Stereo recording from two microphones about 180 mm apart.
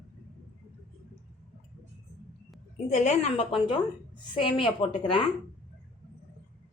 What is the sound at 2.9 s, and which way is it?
A woman's voice, 40° left (ahead or behind).